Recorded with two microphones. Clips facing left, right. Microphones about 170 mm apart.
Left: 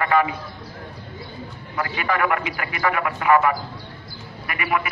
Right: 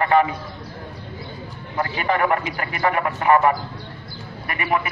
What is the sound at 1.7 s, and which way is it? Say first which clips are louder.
A man's voice: right 2 dB; 30° right (ahead or behind).